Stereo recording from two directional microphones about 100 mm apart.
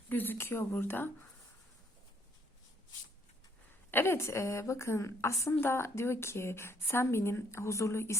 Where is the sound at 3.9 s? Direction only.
25° left (ahead or behind).